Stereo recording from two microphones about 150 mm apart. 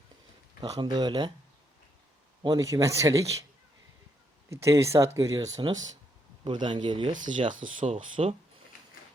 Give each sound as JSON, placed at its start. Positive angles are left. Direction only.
{"t": 0.6, "sound": "speech", "side_deg": -30}
{"t": 2.4, "sound": "speech", "side_deg": -25}
{"t": 4.4, "sound": "speech", "side_deg": -20}
{"t": 7.4, "sound": "speech", "side_deg": -60}
{"t": 8.1, "sound": "speech", "side_deg": -40}